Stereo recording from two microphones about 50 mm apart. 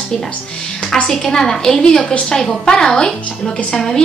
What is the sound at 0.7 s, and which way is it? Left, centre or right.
A woman's voice, centre.